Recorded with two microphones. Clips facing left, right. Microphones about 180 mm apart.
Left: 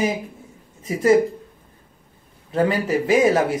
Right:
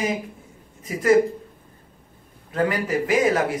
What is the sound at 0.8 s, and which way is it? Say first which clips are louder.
Speech: left 2 dB; 30° left (ahead or behind).